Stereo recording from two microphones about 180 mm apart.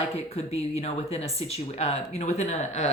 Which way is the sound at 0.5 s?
35° left (ahead or behind).